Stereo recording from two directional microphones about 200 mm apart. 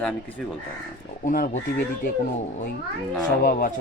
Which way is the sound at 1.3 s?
40° left (ahead or behind).